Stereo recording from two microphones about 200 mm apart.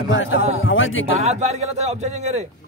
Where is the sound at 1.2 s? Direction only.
35° right (ahead or behind).